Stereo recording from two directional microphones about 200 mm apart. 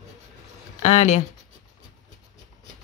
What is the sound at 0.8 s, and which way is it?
Speech, 35° left (ahead or behind).